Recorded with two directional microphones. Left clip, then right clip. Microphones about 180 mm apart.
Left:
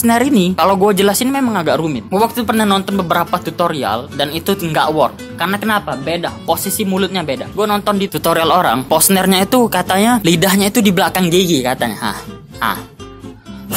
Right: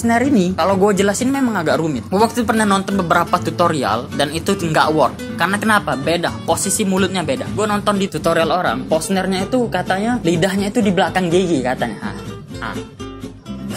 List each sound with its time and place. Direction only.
0.0 s speech: 30° left (ahead or behind); by 6.5 s centre (ahead or behind)
6.5 s speech: 10° left (ahead or behind)
8.1 s speech: 35° left (ahead or behind)